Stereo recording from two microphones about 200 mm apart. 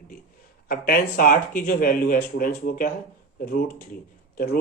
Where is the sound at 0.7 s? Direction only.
45° left (ahead or behind).